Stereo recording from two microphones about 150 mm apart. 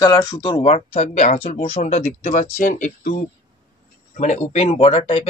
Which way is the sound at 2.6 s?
65° left (ahead or behind).